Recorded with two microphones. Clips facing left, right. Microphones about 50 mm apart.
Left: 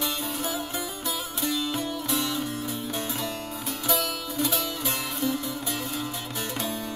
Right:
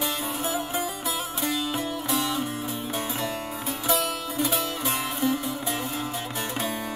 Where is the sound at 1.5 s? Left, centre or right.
Centre.